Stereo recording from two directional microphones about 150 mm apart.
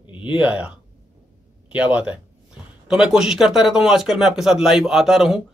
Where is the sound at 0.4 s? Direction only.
10° right (ahead or behind).